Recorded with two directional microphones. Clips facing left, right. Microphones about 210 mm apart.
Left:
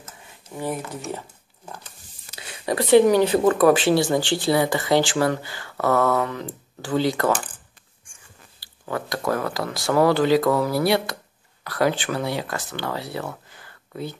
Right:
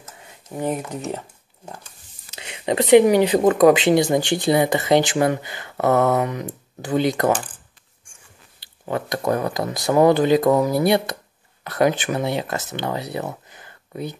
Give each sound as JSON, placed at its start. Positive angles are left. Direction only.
{"t": 0.6, "sound": "speech", "side_deg": -20}
{"t": 2.3, "sound": "speech", "side_deg": -20}
{"t": 8.5, "sound": "speech", "side_deg": -25}